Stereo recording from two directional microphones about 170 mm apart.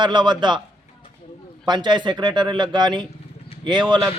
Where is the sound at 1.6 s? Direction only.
25° right (ahead or behind).